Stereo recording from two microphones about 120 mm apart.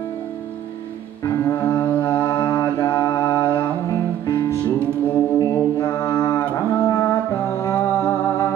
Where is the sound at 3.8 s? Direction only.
30° left (ahead or behind).